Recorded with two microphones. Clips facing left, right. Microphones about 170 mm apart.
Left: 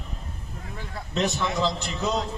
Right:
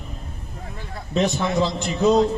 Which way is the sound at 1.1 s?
55° right (ahead or behind).